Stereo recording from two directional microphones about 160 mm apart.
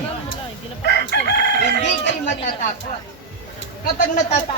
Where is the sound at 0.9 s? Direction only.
90° left.